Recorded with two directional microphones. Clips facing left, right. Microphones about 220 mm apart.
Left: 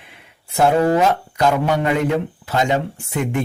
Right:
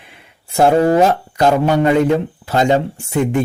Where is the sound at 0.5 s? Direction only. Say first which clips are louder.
Right 3 dB; 35° right (ahead or behind).